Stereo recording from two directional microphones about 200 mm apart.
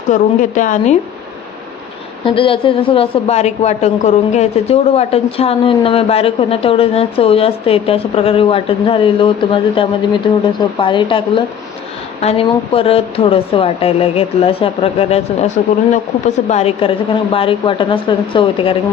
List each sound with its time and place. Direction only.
0.1 s a woman's voice: 40° left (ahead or behind)
2.2 s a woman's voice: 25° left (ahead or behind)
16.5 s a woman's voice: 30° left (ahead or behind)